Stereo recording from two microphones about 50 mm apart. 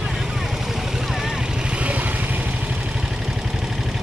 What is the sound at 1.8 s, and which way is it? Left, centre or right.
Vehicle, right.